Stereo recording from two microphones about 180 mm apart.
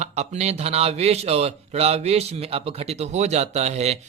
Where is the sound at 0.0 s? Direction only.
40° right (ahead or behind).